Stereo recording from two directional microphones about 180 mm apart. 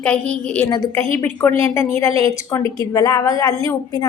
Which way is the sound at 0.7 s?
15° left (ahead or behind).